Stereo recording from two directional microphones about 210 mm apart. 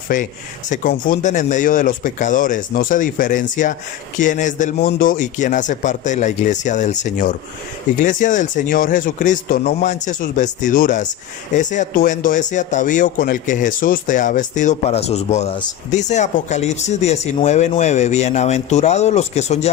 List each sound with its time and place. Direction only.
0.1 s speech: 40° left (ahead or behind)